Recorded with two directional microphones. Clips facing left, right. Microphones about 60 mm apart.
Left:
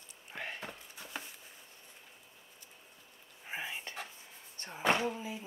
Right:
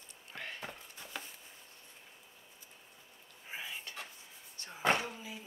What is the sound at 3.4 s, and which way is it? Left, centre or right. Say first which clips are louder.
Dishes: left 3 dB; left.